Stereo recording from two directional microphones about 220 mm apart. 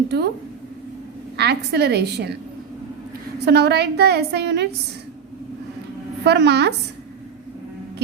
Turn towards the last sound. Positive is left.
turn(degrees=-50)  # may be behind; listen again after turning